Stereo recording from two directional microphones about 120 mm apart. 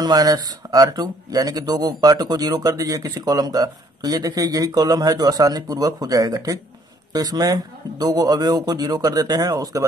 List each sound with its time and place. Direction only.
0.0 s speech: 35° right (ahead or behind)